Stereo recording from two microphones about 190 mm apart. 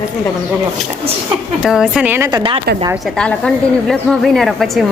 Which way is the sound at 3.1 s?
5° left (ahead or behind).